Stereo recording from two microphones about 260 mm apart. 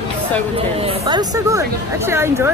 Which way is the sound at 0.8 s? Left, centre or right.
Centre.